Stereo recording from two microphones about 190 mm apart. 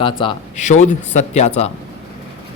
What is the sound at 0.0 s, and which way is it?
Speech, 25° left (ahead or behind).